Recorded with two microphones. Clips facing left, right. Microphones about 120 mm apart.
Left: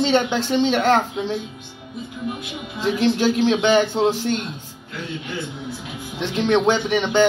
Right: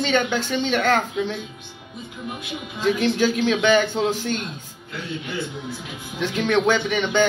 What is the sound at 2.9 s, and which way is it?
A man's voice, 30° left (ahead or behind).